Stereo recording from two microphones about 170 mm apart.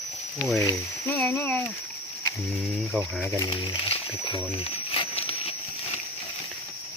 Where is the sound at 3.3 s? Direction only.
25° left (ahead or behind).